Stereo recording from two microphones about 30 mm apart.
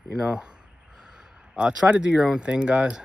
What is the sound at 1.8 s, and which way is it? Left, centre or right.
Speech, right.